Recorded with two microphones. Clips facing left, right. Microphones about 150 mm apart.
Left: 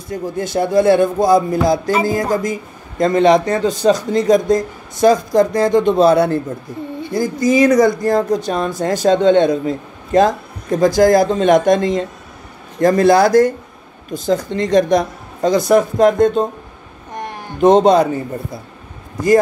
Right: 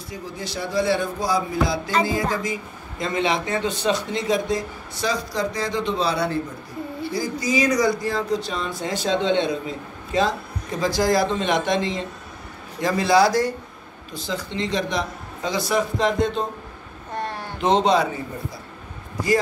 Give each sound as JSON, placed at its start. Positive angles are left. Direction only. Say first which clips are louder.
{"t": 0.1, "sound": "a man's voice", "louder": "left 12 dB", "side_deg": 50}
{"t": 17.1, "sound": "a sound", "louder": "left 1 dB", "side_deg": 15}
{"t": 17.6, "sound": "a man's voice", "louder": "left 9 dB", "side_deg": 50}